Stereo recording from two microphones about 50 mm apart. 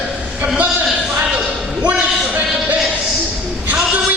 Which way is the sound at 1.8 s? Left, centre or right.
Right.